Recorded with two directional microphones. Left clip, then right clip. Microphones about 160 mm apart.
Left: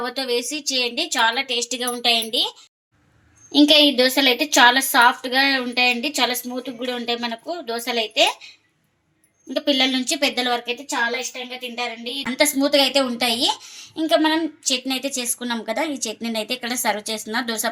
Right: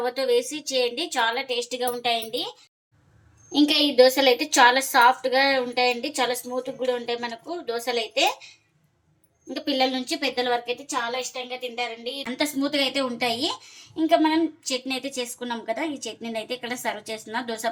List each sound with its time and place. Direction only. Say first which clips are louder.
0.0 s speech: right 1 dB; 45° left (ahead or behind)
3.5 s speech: left 6 dB; 50° left (ahead or behind)
9.5 s speech: left 5 dB; 45° left (ahead or behind)
12.4 s a woman's voice: left 8 dB; 55° left (ahead or behind)